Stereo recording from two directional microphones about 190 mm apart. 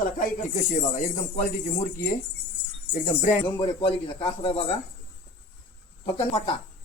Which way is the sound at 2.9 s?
40° left (ahead or behind).